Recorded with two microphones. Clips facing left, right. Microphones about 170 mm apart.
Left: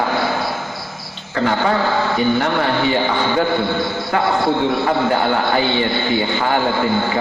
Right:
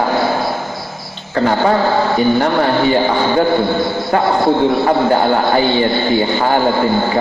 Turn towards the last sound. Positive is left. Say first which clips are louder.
# right 4 dB
turn(degrees=-35)  # may be behind; listen again after turning